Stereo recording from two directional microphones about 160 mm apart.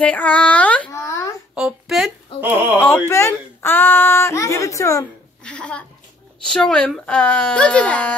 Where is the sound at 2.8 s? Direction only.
15° left (ahead or behind).